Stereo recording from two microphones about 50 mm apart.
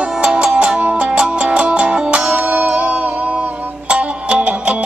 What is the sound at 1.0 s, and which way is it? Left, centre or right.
Music, centre.